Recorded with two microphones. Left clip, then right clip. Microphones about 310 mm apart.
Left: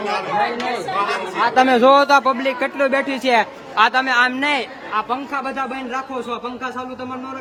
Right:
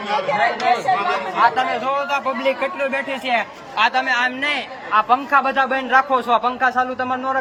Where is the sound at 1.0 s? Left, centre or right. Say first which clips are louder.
Right 2 dB; centre.